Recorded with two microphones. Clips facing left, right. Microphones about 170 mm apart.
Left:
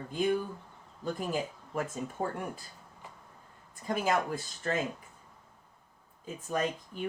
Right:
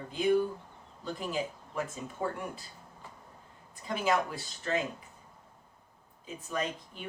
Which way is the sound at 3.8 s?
45° left (ahead or behind).